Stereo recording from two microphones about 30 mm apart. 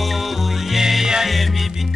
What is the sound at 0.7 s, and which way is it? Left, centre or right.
Music, centre.